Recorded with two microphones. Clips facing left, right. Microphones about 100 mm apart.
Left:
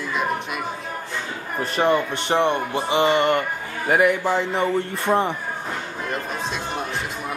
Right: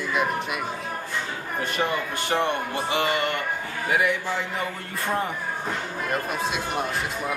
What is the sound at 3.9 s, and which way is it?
Speech, 50° left (ahead or behind).